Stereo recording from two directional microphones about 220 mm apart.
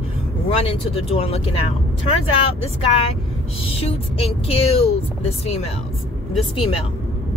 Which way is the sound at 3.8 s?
25° left (ahead or behind).